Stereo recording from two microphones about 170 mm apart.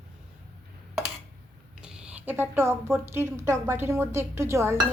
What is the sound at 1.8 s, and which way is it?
Speech, 5° right (ahead or behind).